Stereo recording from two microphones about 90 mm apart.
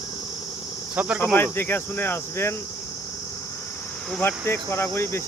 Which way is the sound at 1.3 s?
25° left (ahead or behind).